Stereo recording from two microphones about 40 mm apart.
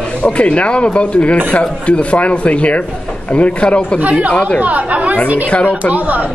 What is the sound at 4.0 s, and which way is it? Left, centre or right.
Speech, right.